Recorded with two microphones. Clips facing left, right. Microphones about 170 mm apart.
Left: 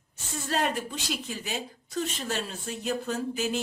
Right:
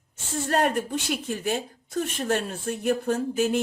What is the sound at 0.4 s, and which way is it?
Speech, 50° right (ahead or behind).